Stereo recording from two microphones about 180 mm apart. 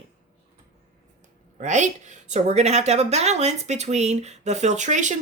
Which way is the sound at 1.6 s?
40° right (ahead or behind).